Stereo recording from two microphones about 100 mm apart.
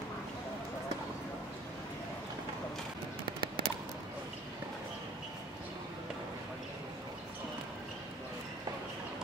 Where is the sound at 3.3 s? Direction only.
55° right (ahead or behind).